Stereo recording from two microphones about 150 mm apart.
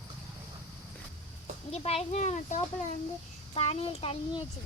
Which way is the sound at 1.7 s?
40° left (ahead or behind).